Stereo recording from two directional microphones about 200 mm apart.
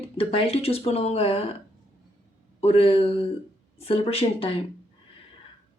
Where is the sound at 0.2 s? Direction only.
30° left (ahead or behind).